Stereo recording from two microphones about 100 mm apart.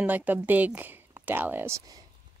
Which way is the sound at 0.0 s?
15° right (ahead or behind).